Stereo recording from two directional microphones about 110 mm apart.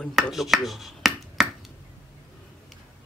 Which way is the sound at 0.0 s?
Centre (ahead or behind).